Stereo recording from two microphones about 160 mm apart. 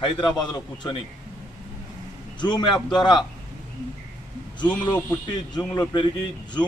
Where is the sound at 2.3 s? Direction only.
25° left (ahead or behind).